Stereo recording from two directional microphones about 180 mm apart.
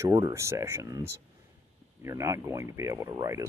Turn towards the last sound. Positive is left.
turn(degrees=-20)  # may be behind; listen again after turning